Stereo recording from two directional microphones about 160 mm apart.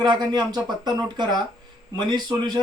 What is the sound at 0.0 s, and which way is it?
Speech, 25° right (ahead or behind).